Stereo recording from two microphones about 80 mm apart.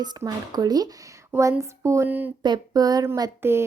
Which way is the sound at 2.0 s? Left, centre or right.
Right.